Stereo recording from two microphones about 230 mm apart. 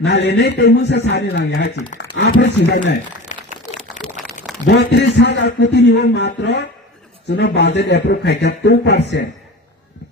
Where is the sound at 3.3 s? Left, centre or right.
Left.